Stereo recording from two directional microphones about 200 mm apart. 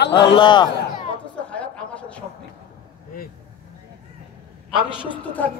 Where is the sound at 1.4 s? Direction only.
5° left (ahead or behind).